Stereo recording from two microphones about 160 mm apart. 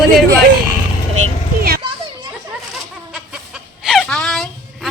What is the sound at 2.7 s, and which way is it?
Goat, 5° right (ahead or behind).